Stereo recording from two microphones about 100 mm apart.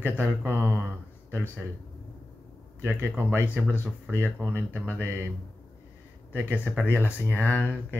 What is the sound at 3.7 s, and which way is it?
Speech, 20° left (ahead or behind).